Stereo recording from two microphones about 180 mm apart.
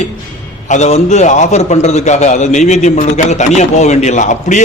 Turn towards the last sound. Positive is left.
turn(degrees=40)  # may be behind; listen again after turning